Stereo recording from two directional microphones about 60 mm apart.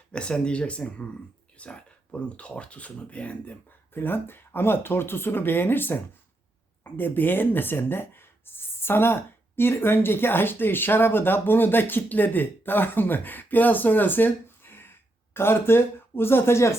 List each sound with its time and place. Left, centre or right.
0.1 s speech: centre
3.9 s speech: left